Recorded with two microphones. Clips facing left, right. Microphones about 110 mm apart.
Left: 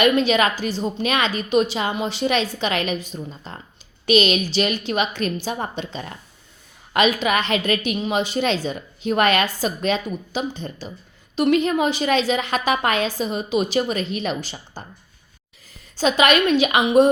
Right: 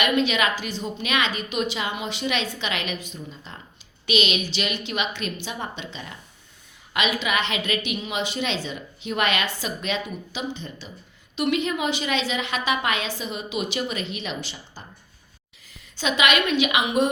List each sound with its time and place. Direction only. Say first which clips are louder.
0.0 s a woman's voice: left 5 dB; 35° left (ahead or behind)